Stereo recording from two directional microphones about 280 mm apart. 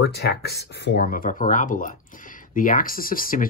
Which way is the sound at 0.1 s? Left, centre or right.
Left.